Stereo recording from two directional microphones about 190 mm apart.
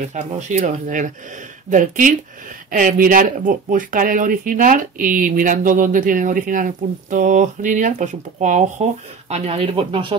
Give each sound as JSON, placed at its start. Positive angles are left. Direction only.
{"t": 0.1, "sound": "speech", "side_deg": -40}